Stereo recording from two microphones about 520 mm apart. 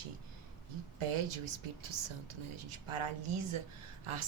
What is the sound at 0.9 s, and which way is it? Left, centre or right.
Speech, right.